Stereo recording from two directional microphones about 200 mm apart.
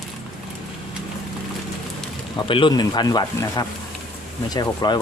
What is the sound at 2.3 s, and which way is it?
Speech, 25° left (ahead or behind).